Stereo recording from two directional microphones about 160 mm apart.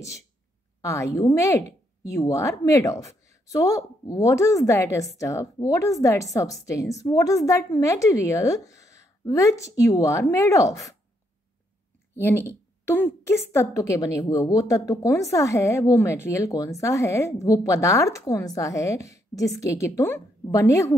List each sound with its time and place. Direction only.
0.8 s a woman's voice: 20° left (ahead or behind)
12.2 s a woman's voice: 15° left (ahead or behind)